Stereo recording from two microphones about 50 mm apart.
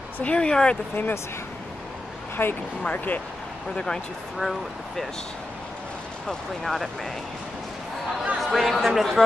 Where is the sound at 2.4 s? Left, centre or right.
Left.